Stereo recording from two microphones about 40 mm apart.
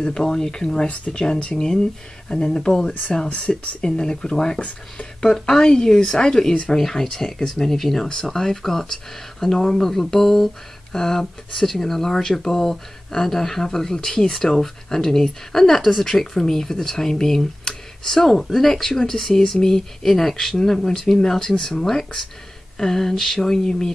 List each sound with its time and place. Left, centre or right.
0.0 s speech: centre
3.3 s speech: left
3.8 s speech: centre
4.6 s speech: left
5.2 s speech: centre
6.8 s speech: centre